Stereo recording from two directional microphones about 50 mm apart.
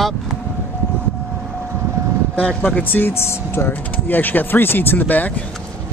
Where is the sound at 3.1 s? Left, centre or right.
Left.